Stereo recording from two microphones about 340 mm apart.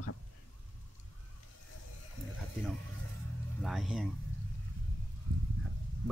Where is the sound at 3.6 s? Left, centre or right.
Centre.